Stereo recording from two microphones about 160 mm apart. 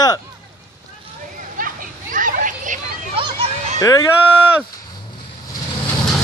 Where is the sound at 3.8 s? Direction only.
20° left (ahead or behind).